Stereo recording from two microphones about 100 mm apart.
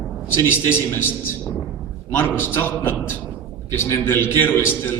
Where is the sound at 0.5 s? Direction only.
25° left (ahead or behind).